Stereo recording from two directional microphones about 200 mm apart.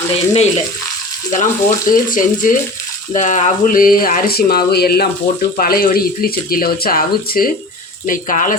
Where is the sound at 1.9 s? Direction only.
40° left (ahead or behind).